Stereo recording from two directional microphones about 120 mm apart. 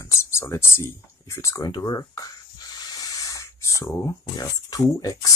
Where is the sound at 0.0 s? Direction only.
25° left (ahead or behind).